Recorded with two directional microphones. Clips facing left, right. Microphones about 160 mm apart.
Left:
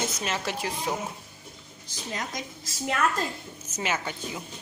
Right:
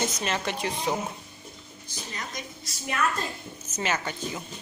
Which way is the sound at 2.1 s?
90° left.